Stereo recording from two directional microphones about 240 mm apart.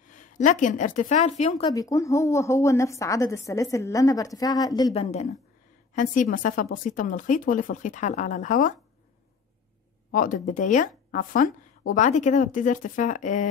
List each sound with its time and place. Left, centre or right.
0.0 s a woman's voice: left
1.6 s a woman's voice: centre; by 8.7 s left
10.1 s speech: left